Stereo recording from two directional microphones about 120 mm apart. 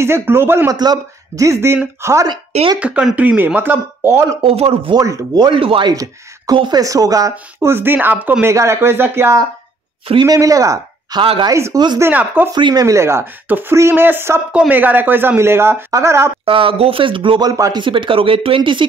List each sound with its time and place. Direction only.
0.0 s speech: 20° right (ahead or behind)
0.7 s speech: 30° right (ahead or behind)
2.8 s speech: 10° right (ahead or behind)
4.4 s speech: 55° right (ahead or behind)
4.9 s speech: 30° right (ahead or behind)
5.6 s speech: 45° right (ahead or behind); by 11.1 s 30° right (ahead or behind)
11.1 s speech: 45° right (ahead or behind)
11.5 s speech: 25° right (ahead or behind)
12.0 s speech: 15° right (ahead or behind)
12.5 s speech: 40° right (ahead or behind)
12.8 s speech: 25° right (ahead or behind)
16.4 s speech: 50° right (ahead or behind)
17.5 s speech: 30° right (ahead or behind)
17.8 s speech: 45° right (ahead or behind)